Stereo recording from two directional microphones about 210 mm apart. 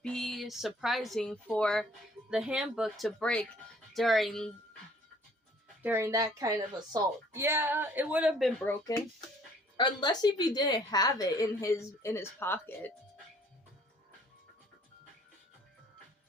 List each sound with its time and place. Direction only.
0.0 s a woman's voice: 5° left (ahead or behind)
5.8 s a woman's voice: 10° right (ahead or behind); by 12.9 s 10° left (ahead or behind)